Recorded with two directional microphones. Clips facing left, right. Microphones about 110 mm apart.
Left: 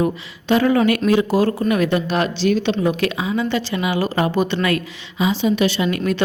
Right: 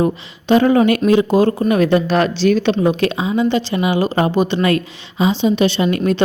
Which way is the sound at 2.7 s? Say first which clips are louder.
Right 3 dB; 25° right (ahead or behind).